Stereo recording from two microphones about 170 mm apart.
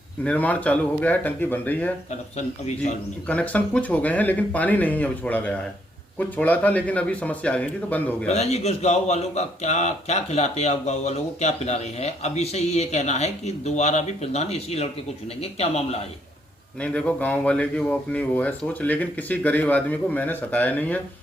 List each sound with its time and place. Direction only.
0.3 s speech: 10° left (ahead or behind)
2.6 s a man's voice: 45° left (ahead or behind)
3.2 s speech: 10° left (ahead or behind)
8.3 s speech: 40° left (ahead or behind)
16.8 s speech: 5° left (ahead or behind)